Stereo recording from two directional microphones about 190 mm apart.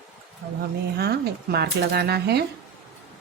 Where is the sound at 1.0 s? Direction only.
60° right (ahead or behind).